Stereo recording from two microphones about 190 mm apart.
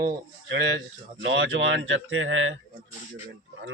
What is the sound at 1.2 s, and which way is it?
Speech, 80° right.